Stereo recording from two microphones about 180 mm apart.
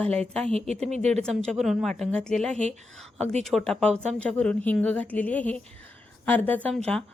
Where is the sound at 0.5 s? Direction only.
35° right (ahead or behind).